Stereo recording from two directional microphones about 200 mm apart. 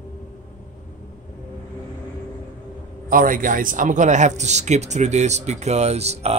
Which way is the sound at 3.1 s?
45° right (ahead or behind).